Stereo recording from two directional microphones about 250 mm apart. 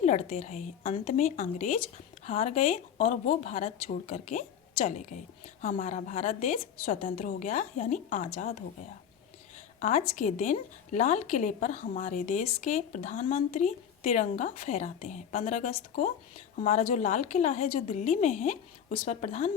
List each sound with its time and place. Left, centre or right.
0.0 s a woman's voice: left
9.8 s a woman's voice: left